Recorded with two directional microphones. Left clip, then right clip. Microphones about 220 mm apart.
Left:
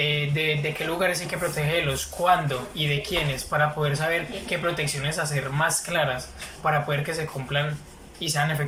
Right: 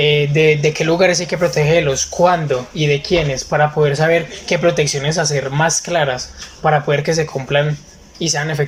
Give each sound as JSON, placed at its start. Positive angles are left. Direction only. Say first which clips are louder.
{"t": 0.0, "sound": "speech", "louder": "right 12 dB", "side_deg": -35}